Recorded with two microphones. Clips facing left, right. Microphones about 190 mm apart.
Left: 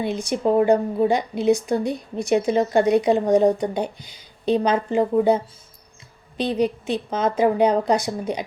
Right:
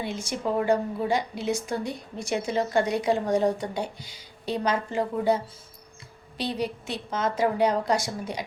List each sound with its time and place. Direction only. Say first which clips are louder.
0.0 s a woman's voice: left 7 dB; 15° left (ahead or behind)